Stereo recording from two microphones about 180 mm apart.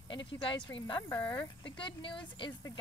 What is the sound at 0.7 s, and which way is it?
Speech, 25° left (ahead or behind).